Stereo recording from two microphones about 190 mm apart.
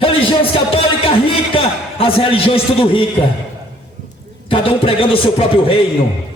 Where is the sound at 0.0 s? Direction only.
30° left (ahead or behind).